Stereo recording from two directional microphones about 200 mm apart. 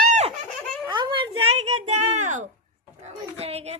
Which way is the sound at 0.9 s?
25° right (ahead or behind).